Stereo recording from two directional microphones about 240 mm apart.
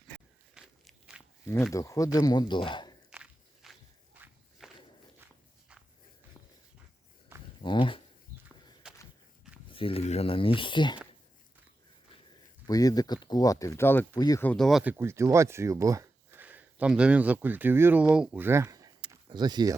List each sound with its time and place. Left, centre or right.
0.5 s walk: centre
1.5 s speech: centre
3.1 s walk: centre
7.6 s speech: centre
8.4 s walk: centre
9.6 s a sound: left
12.6 s speech: centre